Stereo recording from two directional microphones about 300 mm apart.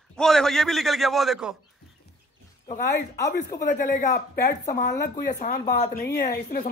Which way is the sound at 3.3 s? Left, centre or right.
Left.